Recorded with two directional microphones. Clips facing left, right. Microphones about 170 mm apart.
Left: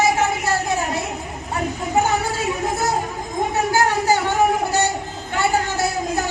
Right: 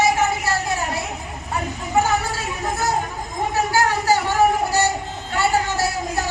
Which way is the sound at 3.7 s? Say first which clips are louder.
Left 1 dB; 20° left (ahead or behind).